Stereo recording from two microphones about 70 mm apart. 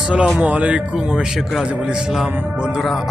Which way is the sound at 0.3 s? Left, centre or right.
Right.